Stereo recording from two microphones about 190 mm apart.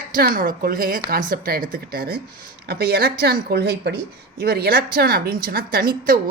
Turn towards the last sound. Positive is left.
turn(degrees=-50)  # may be behind; listen again after turning